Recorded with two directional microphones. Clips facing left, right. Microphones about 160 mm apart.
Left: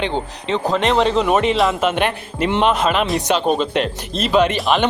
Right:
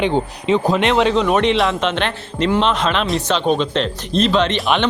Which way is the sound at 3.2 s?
15° left (ahead or behind).